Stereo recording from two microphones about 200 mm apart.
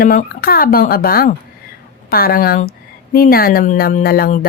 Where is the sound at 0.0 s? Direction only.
45° left (ahead or behind).